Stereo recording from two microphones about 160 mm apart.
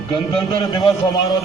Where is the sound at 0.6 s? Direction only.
30° left (ahead or behind).